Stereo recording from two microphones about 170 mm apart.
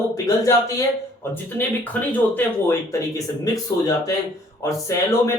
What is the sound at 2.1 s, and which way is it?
Speech, 15° left (ahead or behind).